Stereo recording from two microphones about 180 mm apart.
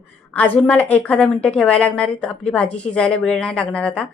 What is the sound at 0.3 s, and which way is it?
A woman's voice, 10° left (ahead or behind).